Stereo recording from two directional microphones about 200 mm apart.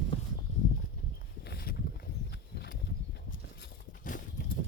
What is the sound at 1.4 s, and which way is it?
Horse, 50° left (ahead or behind).